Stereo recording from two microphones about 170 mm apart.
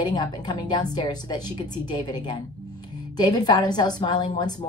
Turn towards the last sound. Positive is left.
turn(degrees=25)  # may be behind; listen again after turning